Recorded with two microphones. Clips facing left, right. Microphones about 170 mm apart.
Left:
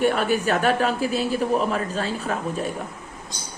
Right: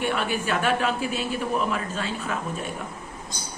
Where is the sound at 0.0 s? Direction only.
40° left (ahead or behind).